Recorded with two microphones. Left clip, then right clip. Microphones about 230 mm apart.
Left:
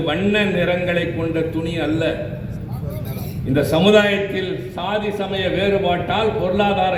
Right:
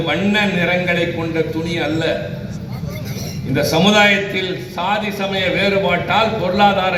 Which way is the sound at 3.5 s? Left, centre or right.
Left.